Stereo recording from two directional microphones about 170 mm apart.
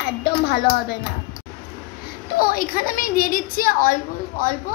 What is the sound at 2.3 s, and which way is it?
A woman's voice, 60° left (ahead or behind).